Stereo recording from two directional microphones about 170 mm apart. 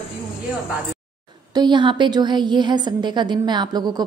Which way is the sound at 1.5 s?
25° right (ahead or behind).